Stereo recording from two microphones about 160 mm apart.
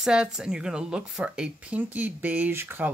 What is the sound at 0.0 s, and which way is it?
Speech, 5° right (ahead or behind).